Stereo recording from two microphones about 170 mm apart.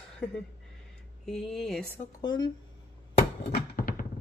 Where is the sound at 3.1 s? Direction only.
65° left (ahead or behind).